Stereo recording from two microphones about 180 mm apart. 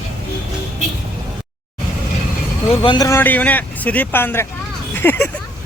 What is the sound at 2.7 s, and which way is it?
Speech, 30° left (ahead or behind).